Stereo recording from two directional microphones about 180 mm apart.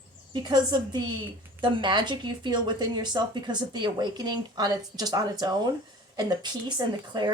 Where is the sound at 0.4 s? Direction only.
25° right (ahead or behind).